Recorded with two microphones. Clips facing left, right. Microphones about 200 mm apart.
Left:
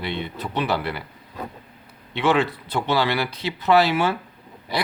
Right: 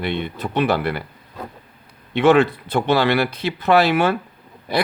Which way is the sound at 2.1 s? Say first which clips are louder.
Right 6 dB; 50° right (ahead or behind).